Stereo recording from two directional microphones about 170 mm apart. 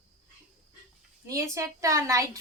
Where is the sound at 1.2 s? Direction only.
15° right (ahead or behind).